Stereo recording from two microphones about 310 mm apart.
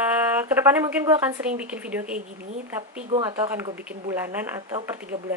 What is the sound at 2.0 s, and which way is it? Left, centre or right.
Speech, right.